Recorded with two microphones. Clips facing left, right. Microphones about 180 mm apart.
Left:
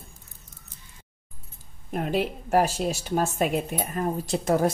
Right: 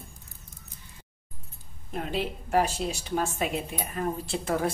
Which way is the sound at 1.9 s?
50° left (ahead or behind).